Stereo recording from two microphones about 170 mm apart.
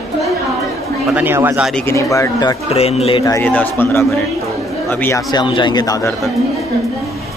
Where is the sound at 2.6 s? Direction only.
35° left (ahead or behind).